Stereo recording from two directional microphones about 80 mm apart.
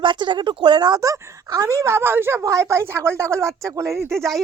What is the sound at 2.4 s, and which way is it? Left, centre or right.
A woman's voice, right.